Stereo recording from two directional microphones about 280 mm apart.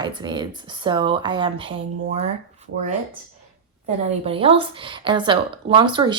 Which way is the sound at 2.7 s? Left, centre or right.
Right.